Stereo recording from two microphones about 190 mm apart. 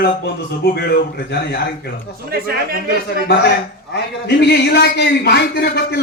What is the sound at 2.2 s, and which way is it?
Speech, 50° right (ahead or behind).